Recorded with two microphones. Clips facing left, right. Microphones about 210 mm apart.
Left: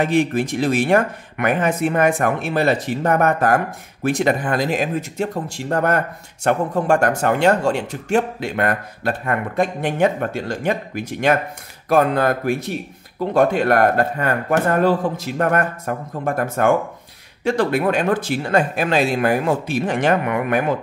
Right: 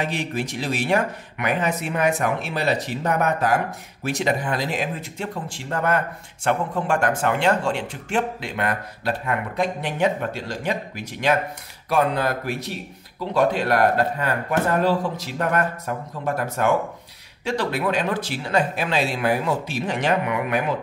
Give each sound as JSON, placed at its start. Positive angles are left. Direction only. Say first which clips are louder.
{"t": 0.0, "sound": "speech", "louder": "left 8 dB", "side_deg": 50}